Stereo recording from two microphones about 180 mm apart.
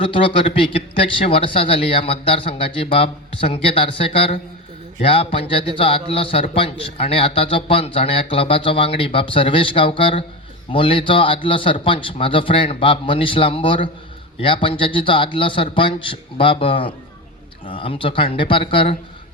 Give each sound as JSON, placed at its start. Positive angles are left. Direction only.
{"t": 0.0, "sound": "a man's voice", "side_deg": 30}